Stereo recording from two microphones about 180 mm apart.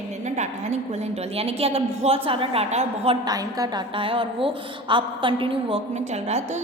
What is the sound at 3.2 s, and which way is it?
A woman's voice, 20° right (ahead or behind).